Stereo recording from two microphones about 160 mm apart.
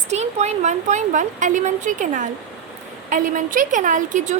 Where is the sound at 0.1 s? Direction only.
45° right (ahead or behind).